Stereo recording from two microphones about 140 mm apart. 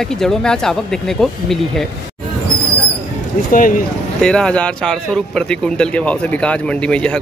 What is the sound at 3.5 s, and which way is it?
Speech, 75° left (ahead or behind).